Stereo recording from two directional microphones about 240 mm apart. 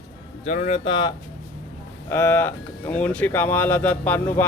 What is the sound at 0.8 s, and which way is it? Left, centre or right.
Speech, centre.